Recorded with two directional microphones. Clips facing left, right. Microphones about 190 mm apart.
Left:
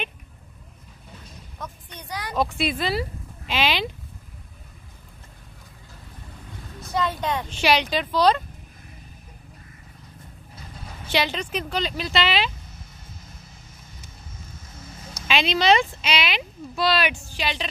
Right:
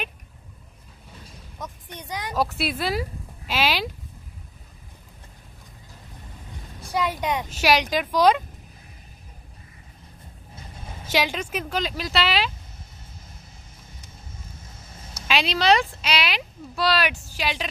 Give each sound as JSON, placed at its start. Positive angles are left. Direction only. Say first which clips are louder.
{"t": 1.6, "sound": "a sound", "louder": "right 1 dB", "side_deg": -15}
{"t": 2.3, "sound": "speech", "louder": "left 1 dB", "side_deg": -5}
{"t": 6.8, "sound": "speech", "louder": "even", "side_deg": -10}
{"t": 11.1, "sound": "speech", "louder": "even", "side_deg": -10}
{"t": 15.2, "sound": "speech", "louder": "left 1 dB", "side_deg": -5}